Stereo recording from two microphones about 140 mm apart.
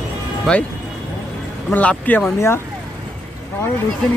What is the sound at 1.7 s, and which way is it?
Speech, 10° left (ahead or behind).